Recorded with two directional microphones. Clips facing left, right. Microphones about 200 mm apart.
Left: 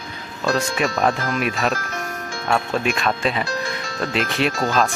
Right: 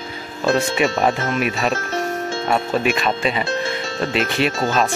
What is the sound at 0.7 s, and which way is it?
Speech, 5° right (ahead or behind).